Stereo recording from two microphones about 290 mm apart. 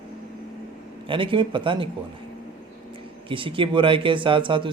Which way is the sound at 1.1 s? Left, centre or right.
Centre.